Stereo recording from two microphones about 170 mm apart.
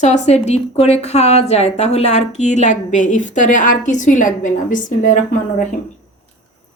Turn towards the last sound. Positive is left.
turn(degrees=50)  # may be behind; listen again after turning